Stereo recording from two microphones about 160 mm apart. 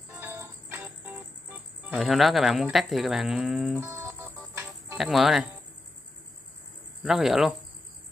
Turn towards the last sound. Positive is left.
turn(degrees=0)  # may be behind; listen again after turning